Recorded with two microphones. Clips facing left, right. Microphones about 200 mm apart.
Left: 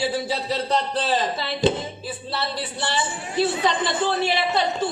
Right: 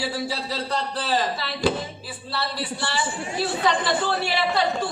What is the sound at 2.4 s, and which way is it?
A man's voice, 20° left (ahead or behind).